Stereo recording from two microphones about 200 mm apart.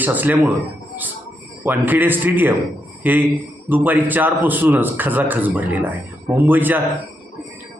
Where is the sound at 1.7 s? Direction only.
10° right (ahead or behind).